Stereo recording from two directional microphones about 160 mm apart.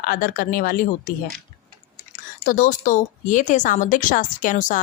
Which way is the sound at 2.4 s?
55° left (ahead or behind).